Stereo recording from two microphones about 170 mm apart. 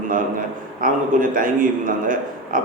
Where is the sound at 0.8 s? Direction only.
55° right (ahead or behind).